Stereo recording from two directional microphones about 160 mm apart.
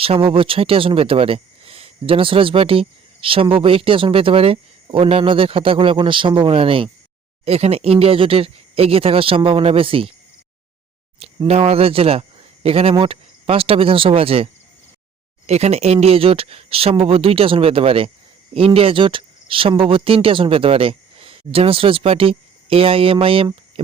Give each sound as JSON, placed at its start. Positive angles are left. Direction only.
{"t": 0.0, "sound": "speech", "side_deg": -35}
{"t": 11.2, "sound": "speech", "side_deg": -40}